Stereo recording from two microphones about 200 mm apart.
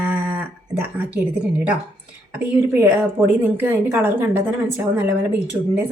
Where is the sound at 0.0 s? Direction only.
10° right (ahead or behind).